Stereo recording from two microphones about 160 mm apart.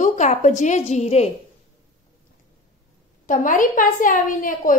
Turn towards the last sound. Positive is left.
turn(degrees=55)  # may be behind; listen again after turning